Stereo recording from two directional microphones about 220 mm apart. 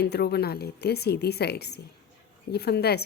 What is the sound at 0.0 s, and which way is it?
A woman's voice, 50° left (ahead or behind).